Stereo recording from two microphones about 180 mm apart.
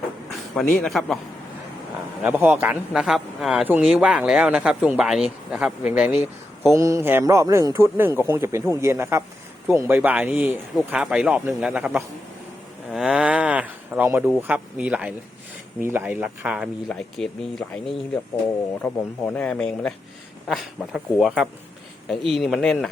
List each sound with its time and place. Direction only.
0.3 s a sound: centre (ahead or behind)
0.8 s speech: 5° left (ahead or behind)
2.2 s speech: 10° right (ahead or behind)
6.7 s speech: 15° right (ahead or behind); by 18.2 s centre (ahead or behind)
19.3 s speech: 5° left (ahead or behind)